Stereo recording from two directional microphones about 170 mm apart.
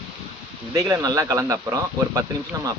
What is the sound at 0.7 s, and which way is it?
Speech, 15° right (ahead or behind).